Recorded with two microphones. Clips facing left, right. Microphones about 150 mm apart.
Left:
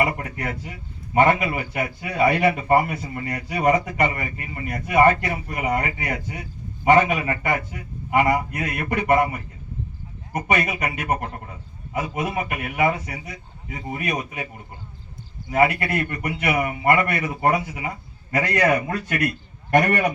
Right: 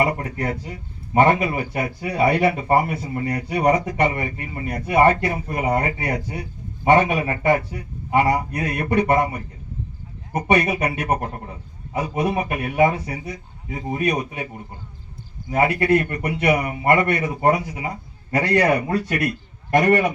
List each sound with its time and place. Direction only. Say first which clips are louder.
0.0 s speech: right 2 dB; 35° right (ahead or behind)
15.5 s speech: right 2 dB; 35° right (ahead or behind)